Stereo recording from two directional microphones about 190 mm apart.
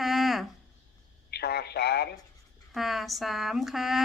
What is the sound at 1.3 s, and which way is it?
Speech, 60° left (ahead or behind).